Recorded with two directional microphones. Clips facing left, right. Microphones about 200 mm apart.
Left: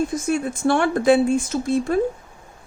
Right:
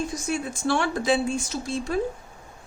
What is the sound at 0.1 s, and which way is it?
Speech, 55° left (ahead or behind).